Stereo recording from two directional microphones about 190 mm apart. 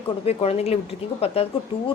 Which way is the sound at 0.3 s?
30° left (ahead or behind).